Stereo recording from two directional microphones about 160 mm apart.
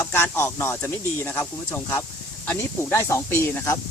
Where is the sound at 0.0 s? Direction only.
15° left (ahead or behind).